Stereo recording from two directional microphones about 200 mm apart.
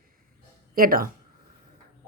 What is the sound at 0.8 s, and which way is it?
Speech, 45° right (ahead or behind).